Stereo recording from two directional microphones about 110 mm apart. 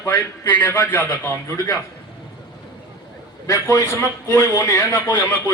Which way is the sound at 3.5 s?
30° left (ahead or behind).